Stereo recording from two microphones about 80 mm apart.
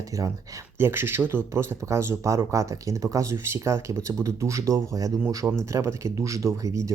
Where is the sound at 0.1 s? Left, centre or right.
Right.